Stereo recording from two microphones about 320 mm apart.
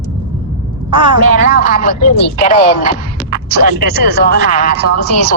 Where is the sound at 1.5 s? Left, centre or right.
Left.